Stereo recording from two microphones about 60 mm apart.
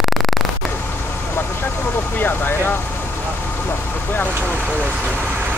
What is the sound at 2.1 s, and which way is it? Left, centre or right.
Vehicle, left.